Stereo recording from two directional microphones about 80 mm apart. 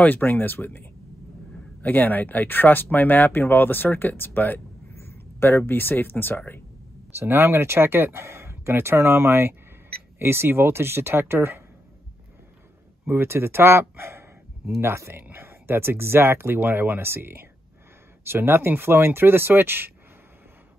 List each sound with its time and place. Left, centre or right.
0.0 s speech: left
7.2 s speech: right
13.0 s speech: right